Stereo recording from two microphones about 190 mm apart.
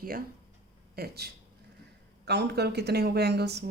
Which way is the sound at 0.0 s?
50° right (ahead or behind).